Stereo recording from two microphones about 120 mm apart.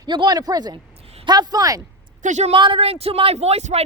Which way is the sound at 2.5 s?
45° right (ahead or behind).